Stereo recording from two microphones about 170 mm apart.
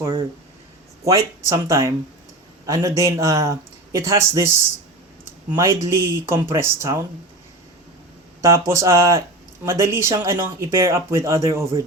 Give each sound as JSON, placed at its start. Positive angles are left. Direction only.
{"t": 1.0, "sound": "a man's voice", "side_deg": -20}
{"t": 8.4, "sound": "a man's voice", "side_deg": -20}